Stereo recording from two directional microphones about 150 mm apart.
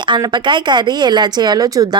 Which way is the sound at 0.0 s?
30° right (ahead or behind).